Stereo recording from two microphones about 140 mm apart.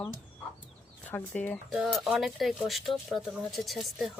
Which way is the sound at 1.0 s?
10° left (ahead or behind).